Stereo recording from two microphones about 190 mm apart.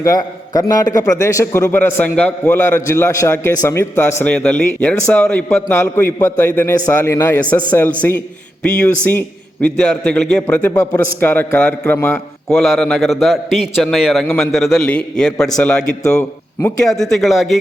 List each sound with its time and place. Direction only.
0.0 s a man's voice: 20° left (ahead or behind)
12.5 s a man's voice: centre (ahead or behind)
15.8 s a man's voice: 15° left (ahead or behind)
16.8 s a man's voice: centre (ahead or behind)